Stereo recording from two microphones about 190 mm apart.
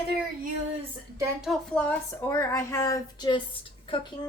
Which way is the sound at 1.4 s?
Centre (ahead or behind).